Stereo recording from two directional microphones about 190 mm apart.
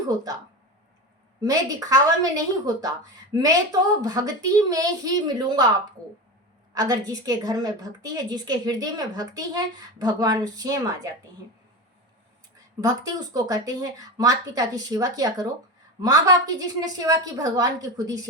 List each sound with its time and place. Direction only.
1.4 s a woman's voice: 20° right (ahead or behind)
6.7 s a woman's voice: 20° right (ahead or behind)
12.8 s a woman's voice: 20° right (ahead or behind)